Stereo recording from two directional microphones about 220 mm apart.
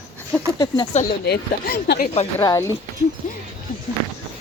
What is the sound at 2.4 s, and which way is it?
Speech, 15° left (ahead or behind).